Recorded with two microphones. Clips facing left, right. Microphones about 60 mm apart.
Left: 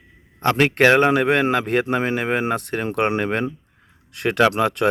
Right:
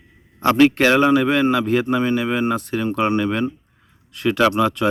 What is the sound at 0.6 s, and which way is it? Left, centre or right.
A man's voice, left.